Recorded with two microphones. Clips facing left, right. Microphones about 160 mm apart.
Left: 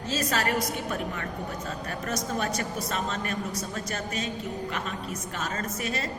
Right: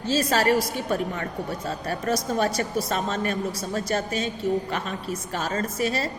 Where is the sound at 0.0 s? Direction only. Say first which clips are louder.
Right 6 dB; 30° right (ahead or behind).